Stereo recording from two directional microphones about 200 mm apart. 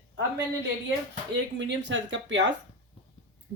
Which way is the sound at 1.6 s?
65° right (ahead or behind).